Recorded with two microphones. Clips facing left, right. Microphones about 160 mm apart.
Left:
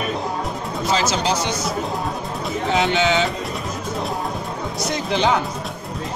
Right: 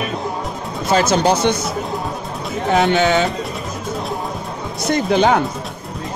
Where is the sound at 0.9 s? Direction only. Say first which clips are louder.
Right 7 dB; 55° right (ahead or behind).